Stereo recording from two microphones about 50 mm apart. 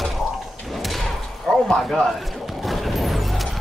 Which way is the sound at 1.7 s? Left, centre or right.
Centre.